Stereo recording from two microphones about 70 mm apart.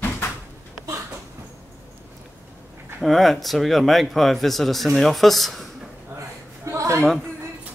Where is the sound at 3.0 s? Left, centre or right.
Centre.